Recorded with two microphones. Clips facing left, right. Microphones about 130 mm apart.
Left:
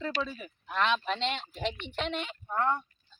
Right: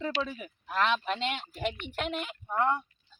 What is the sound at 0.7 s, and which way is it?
A woman's voice, 5° right (ahead or behind).